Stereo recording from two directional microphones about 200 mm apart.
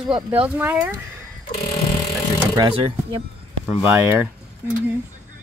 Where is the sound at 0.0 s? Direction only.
5° right (ahead or behind).